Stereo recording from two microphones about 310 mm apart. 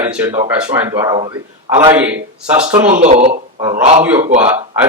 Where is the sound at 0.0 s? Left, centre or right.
Centre.